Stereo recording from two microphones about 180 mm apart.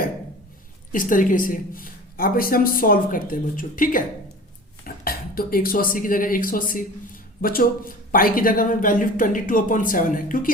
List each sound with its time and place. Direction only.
0.9 s speech: 50° left (ahead or behind)
5.0 s speech: 55° left (ahead or behind)